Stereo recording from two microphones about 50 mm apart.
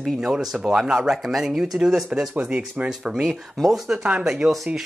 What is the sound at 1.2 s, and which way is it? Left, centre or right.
Speech, centre.